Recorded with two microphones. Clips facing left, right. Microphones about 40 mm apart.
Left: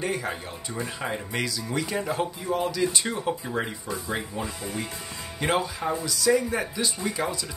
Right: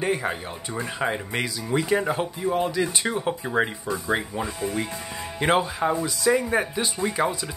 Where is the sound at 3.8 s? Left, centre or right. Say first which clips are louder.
Right 5 dB; right.